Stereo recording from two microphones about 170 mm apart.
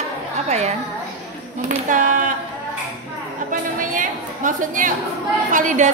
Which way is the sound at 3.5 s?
50° right (ahead or behind).